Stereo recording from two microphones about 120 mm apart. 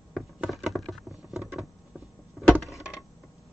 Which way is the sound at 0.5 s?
Centre (ahead or behind).